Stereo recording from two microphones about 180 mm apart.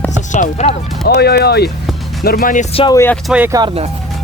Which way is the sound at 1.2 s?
60° left (ahead or behind).